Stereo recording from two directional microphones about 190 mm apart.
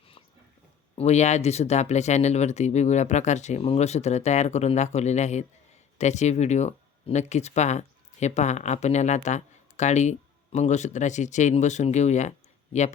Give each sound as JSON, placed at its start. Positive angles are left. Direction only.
{"t": 0.9, "sound": "speech", "side_deg": 35}